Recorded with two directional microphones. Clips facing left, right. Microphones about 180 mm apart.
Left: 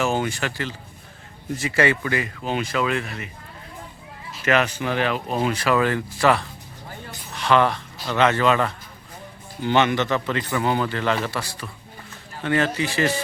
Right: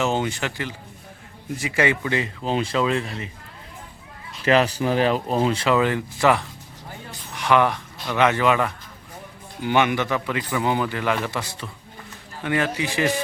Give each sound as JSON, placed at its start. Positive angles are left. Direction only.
{"t": 0.0, "sound": "speech", "side_deg": -20}
{"t": 4.4, "sound": "a man's voice", "side_deg": -35}